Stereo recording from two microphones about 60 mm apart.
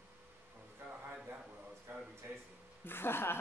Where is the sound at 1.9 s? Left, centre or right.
Right.